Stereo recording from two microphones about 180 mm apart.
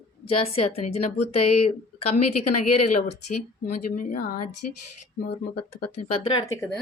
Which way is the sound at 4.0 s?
50° left (ahead or behind).